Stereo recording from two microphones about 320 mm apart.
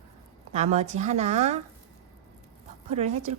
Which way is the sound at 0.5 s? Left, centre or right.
Right.